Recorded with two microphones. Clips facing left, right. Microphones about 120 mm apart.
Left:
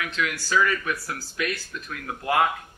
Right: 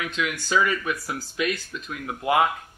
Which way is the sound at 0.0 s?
20° right (ahead or behind).